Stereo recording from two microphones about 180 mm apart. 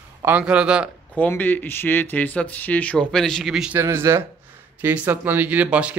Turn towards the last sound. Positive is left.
turn(degrees=-10)  # may be behind; listen again after turning